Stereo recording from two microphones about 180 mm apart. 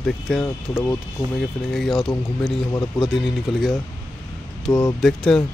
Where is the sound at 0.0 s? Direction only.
Centre (ahead or behind).